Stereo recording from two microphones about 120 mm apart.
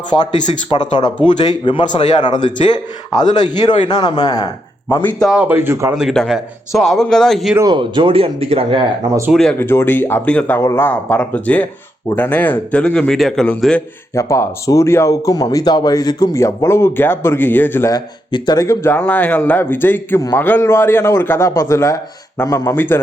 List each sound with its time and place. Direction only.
0.7 s a man's voice: 35° left (ahead or behind)
5.3 s speech: 10° right (ahead or behind)
6.0 s a man's voice: centre (ahead or behind)
7.7 s speech: 40° right (ahead or behind)
9.3 s a man's voice: 5° left (ahead or behind)
9.6 s a man's voice: 20° left (ahead or behind)
10.6 s a man's voice: 20° left (ahead or behind)
14.1 s speech: 25° left (ahead or behind)
17.9 s a man's voice: 40° left (ahead or behind)
18.6 s a man's voice: 25° left (ahead or behind)